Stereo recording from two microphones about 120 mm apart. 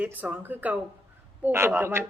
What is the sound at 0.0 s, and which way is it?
Speech, 15° right (ahead or behind).